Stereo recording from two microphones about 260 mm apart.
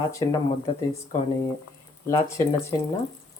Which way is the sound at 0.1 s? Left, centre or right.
Centre.